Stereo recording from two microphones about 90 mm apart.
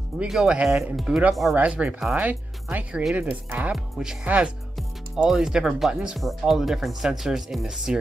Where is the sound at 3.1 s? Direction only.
15° right (ahead or behind).